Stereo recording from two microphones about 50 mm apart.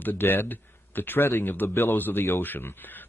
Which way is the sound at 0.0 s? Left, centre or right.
Left.